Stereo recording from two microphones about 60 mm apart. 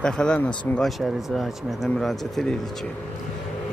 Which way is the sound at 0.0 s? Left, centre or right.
Centre.